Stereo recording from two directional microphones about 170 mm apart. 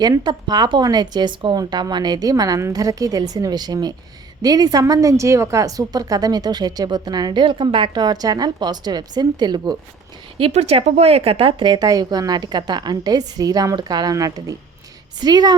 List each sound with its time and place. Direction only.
0.0 s a woman's voice: 25° right (ahead or behind)
10.3 s a woman's voice: 35° right (ahead or behind)